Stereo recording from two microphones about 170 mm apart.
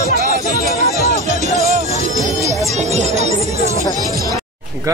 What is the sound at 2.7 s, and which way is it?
Music, 40° right (ahead or behind).